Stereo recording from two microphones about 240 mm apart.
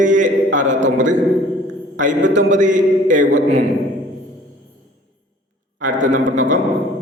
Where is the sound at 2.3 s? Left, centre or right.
Right.